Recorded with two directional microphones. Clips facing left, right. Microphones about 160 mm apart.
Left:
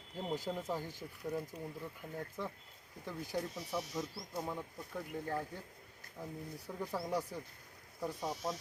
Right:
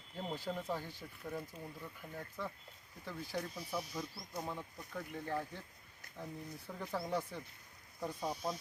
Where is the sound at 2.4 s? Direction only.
20° left (ahead or behind).